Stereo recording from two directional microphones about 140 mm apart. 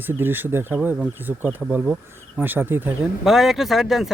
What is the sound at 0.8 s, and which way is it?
Speech, 5° right (ahead or behind).